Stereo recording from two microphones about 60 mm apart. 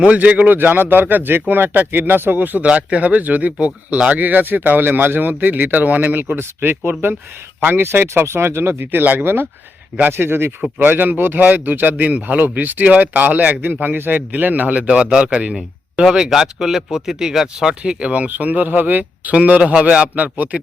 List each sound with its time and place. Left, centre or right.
0.0 s a man's voice: right
15.5 s speech: centre; by 20.6 s right